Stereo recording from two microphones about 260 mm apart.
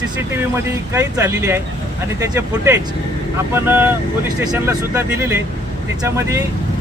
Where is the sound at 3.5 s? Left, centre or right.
Centre.